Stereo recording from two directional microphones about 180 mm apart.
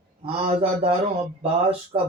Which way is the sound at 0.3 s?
30° right (ahead or behind).